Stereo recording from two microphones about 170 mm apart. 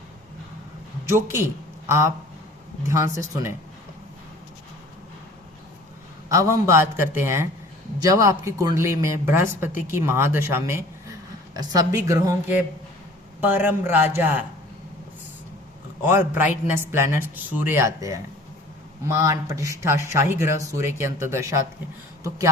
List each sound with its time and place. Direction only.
1.0 s a man's voice: 15° right (ahead or behind)
6.2 s a man's voice: 15° right (ahead or behind)
16.0 s a man's voice: 15° right (ahead or behind)